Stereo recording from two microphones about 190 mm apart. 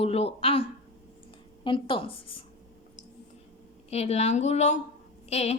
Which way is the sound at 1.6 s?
25° left (ahead or behind).